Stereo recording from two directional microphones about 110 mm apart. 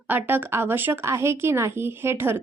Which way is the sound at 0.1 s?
20° right (ahead or behind).